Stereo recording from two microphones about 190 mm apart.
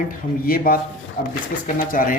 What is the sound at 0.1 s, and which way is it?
Speech, 50° left (ahead or behind).